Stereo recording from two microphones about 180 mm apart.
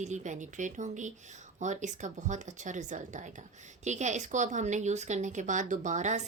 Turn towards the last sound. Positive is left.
turn(degrees=-40)  # may be behind; listen again after turning